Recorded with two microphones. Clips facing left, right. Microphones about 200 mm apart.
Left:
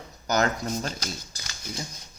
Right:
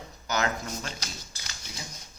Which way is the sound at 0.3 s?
40° left (ahead or behind).